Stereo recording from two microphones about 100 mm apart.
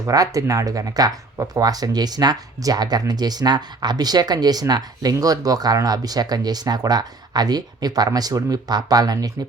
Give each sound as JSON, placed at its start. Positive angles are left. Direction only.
{"t": 0.0, "sound": "speech", "side_deg": -35}